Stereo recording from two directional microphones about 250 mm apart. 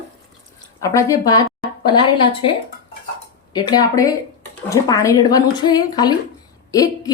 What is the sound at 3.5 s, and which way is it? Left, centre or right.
Speech, centre.